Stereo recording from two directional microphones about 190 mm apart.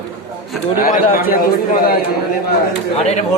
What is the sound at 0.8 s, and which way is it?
Speech, 45° left (ahead or behind).